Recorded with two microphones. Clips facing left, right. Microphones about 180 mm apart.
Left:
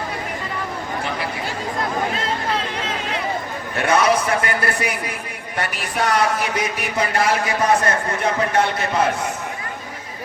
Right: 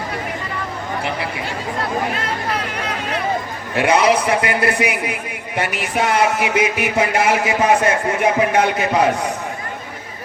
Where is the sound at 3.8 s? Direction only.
20° right (ahead or behind).